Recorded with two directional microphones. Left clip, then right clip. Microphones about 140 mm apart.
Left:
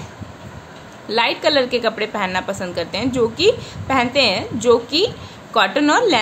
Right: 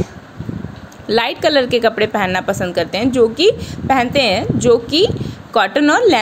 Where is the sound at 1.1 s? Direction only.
45° right (ahead or behind).